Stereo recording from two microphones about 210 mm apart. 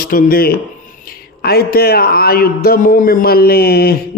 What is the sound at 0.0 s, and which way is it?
A man's voice, 45° left (ahead or behind).